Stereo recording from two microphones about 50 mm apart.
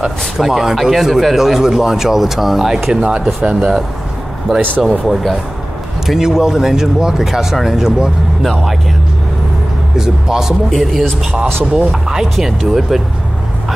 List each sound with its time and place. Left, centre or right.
0.4 s speech: centre
2.9 s speech: centre
5.0 s speech: centre
8.4 s speech: centre
9.9 s speech: centre
10.7 s speech: centre